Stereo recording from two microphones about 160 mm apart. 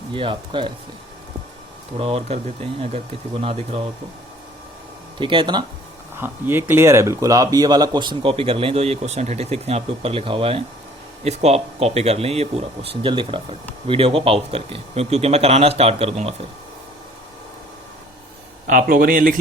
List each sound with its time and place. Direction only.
0.1 s speech: 30° right (ahead or behind)
2.0 s speech: 35° right (ahead or behind)
5.2 s speech: 30° right (ahead or behind)
6.1 s speech: 15° right (ahead or behind); by 16.5 s 40° right (ahead or behind)
18.7 s speech: 60° right (ahead or behind)